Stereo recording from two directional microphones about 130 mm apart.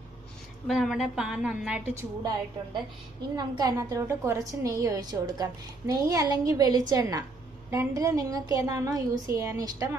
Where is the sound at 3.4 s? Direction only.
30° right (ahead or behind).